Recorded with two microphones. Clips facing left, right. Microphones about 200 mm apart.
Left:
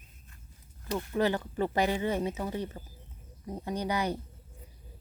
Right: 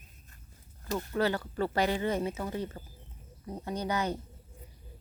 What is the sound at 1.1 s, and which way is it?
Speech, 15° left (ahead or behind).